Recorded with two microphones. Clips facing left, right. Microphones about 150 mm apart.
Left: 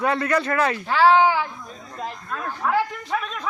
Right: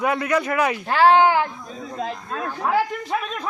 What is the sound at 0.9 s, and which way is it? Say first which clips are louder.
Speech: right 1 dB; 55° right (ahead or behind).